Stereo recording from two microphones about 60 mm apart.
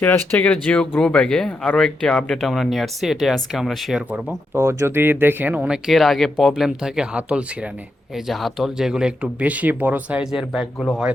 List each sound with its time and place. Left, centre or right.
0.0 s speech: left
0.4 s speech: centre
4.5 s speech: right
4.9 s speech: right
5.6 s speech: centre
5.9 s speech: centre
6.5 s speech: centre
8.1 s speech: centre; by 10.2 s right
10.3 s speech: centre